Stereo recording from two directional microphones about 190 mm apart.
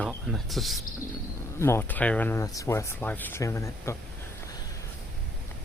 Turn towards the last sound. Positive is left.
turn(degrees=15)  # may be behind; listen again after turning